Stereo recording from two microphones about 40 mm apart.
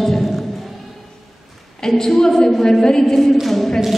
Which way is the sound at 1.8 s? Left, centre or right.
Centre.